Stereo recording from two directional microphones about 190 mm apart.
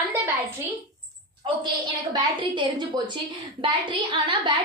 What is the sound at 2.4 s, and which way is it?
Speech, 25° right (ahead or behind).